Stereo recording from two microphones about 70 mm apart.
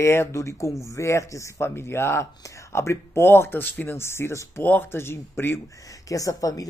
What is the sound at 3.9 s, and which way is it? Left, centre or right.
Speech, left.